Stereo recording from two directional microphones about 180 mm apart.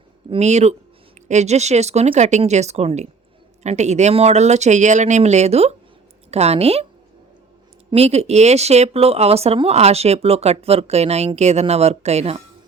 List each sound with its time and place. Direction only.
0.3 s speech: 40° right (ahead or behind)
7.9 s speech: 35° right (ahead or behind)